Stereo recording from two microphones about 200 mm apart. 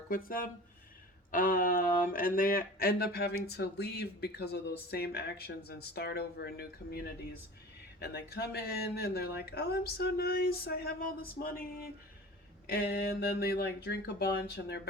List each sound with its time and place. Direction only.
0.1 s speech: 45° left (ahead or behind)